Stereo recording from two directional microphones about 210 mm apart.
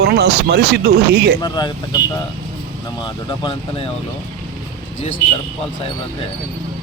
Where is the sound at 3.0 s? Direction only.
25° left (ahead or behind).